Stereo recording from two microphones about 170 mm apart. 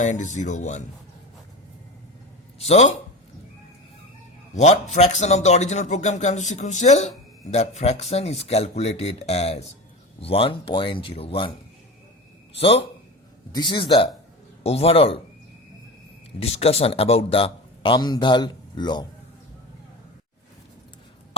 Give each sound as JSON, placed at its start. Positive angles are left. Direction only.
{"t": 0.0, "sound": "speech", "side_deg": 45}
{"t": 2.6, "sound": "speech", "side_deg": 40}
{"t": 4.5, "sound": "speech", "side_deg": 40}
{"t": 12.5, "sound": "speech", "side_deg": 35}
{"t": 16.4, "sound": "speech", "side_deg": 35}